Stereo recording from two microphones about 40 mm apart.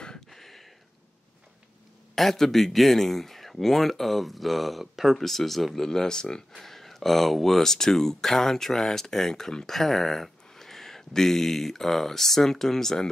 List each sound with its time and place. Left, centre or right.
0.3 s a sound: centre
2.1 s speech: centre
6.6 s speech: centre